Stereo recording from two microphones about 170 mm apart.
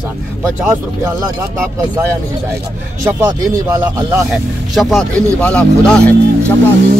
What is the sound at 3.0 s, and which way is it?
Speech, 20° right (ahead or behind).